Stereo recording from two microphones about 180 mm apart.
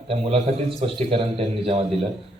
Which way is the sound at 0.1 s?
35° right (ahead or behind).